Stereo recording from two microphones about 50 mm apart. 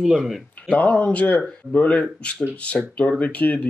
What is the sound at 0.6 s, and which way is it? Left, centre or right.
Speech, left.